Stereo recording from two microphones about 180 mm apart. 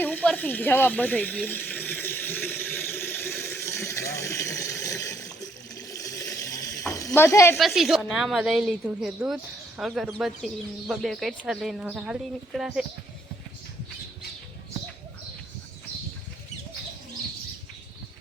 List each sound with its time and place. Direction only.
0.0 s speech: 10° left (ahead or behind)
1.5 s a sound: 10° left (ahead or behind)
7.1 s speech: 15° left (ahead or behind)
7.6 s a woman's voice: centre (ahead or behind)